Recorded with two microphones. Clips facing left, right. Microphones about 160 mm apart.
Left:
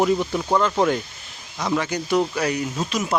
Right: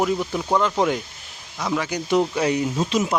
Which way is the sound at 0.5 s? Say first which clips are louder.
Left 1 dB; 10° right (ahead or behind).